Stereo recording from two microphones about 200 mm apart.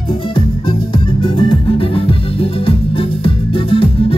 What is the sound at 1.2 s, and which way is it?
Music, 25° left (ahead or behind).